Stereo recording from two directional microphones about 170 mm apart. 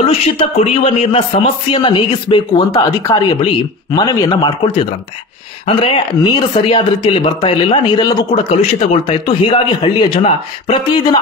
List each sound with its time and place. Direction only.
0.4 s speech: 35° left (ahead or behind)
8.9 s speech: 35° left (ahead or behind)